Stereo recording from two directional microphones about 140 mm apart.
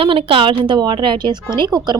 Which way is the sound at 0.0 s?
40° right (ahead or behind).